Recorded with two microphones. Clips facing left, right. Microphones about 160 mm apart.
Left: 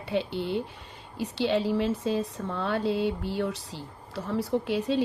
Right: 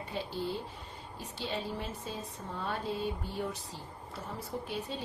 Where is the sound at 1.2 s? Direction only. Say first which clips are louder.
Left 12 dB; 85° left.